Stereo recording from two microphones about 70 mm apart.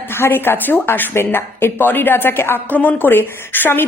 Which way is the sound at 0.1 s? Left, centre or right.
Left.